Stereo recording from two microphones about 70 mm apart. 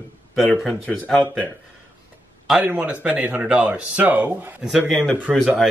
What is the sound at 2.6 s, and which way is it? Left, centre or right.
Speech, right.